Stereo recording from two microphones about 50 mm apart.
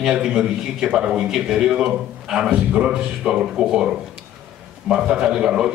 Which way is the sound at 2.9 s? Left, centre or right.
Centre.